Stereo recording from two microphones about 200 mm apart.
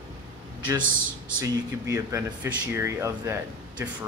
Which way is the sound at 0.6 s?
20° right (ahead or behind).